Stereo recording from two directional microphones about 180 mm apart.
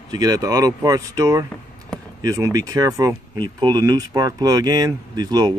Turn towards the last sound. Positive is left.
turn(degrees=-20)  # may be behind; listen again after turning